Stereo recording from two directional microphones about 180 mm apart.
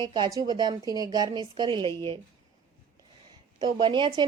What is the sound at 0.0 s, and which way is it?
A woman's voice, 25° right (ahead or behind).